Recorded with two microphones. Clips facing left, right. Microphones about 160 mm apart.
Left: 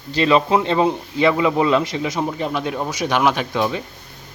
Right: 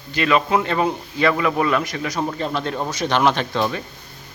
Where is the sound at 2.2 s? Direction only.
10° left (ahead or behind).